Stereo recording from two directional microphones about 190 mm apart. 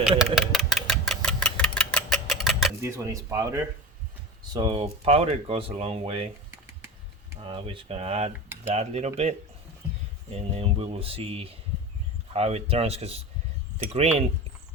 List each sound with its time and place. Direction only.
0.2 s engine: centre (ahead or behind)
2.8 s speech: 15° right (ahead or behind)
4.5 s speech: 25° right (ahead or behind)
7.4 s speech: 30° right (ahead or behind)
10.3 s speech: 30° right (ahead or behind)